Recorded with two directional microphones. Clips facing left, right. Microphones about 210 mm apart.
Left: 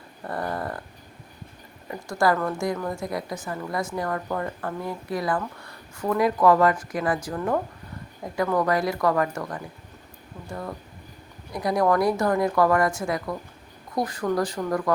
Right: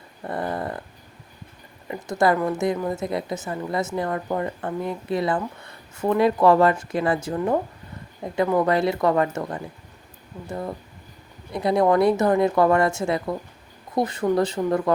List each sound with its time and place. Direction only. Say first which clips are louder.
0.3 s a woman's voice: right 2 dB; 25° right (ahead or behind)
1.9 s a woman's voice: right 2 dB; 20° right (ahead or behind)